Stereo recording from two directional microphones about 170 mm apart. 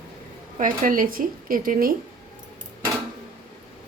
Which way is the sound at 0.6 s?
50° right (ahead or behind).